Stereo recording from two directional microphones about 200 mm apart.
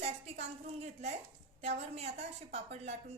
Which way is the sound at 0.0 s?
35° right (ahead or behind).